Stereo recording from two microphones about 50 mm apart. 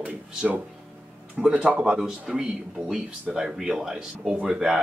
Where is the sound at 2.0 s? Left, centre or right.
Centre.